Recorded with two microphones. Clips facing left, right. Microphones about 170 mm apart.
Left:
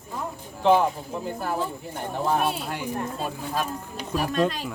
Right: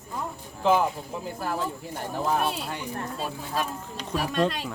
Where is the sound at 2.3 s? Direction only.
Centre (ahead or behind).